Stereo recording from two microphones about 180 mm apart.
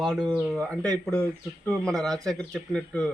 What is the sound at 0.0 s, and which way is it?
Speech, centre (ahead or behind).